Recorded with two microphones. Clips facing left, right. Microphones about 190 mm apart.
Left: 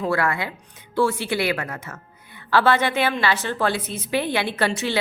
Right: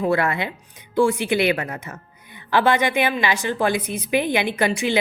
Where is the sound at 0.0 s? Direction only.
20° right (ahead or behind).